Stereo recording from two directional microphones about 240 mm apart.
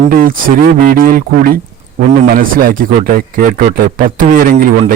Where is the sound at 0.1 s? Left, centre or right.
Right.